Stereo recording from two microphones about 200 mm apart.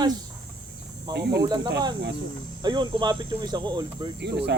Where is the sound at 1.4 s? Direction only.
20° right (ahead or behind).